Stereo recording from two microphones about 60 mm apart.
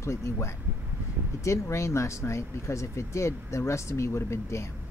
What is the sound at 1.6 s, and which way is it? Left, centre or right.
Speech, left.